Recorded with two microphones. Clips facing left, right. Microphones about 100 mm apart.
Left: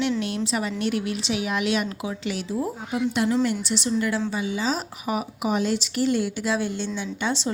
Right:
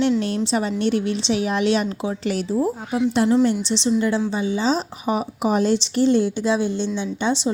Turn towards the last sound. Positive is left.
turn(degrees=-20)  # may be behind; listen again after turning